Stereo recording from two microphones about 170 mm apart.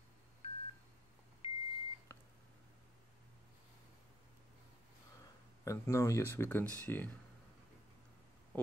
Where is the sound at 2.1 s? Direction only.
15° left (ahead or behind).